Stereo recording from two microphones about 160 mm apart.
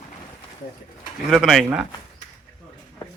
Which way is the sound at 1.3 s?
Centre (ahead or behind).